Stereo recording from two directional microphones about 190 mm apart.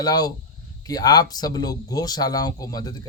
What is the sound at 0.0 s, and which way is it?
Speech, 20° left (ahead or behind).